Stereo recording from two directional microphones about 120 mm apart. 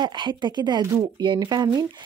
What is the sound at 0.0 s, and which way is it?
A woman's voice, 40° right (ahead or behind).